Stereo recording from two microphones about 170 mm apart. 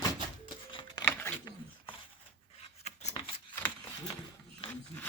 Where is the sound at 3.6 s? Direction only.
10° left (ahead or behind).